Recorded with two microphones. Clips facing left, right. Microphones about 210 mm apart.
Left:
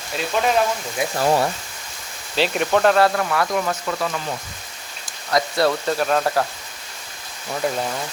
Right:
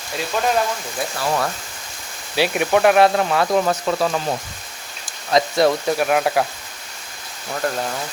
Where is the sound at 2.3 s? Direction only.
10° right (ahead or behind).